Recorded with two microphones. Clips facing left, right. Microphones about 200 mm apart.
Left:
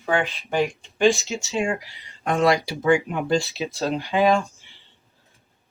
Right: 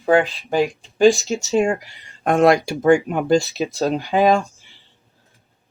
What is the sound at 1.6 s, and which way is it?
Speech, 45° right (ahead or behind).